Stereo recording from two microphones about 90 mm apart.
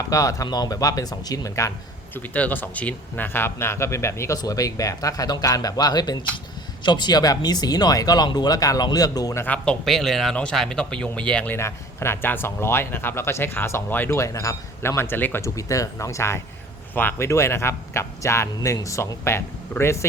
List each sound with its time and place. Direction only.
0.1 s a man's voice: 40° left (ahead or behind)
2.1 s speech: 20° left (ahead or behind); by 9.3 s 45° left (ahead or behind)
9.8 s speech: 5° left (ahead or behind)
11.5 s speech: 30° left (ahead or behind)
14.2 s a man's voice: 35° left (ahead or behind)
16.9 s a man's voice: 20° left (ahead or behind)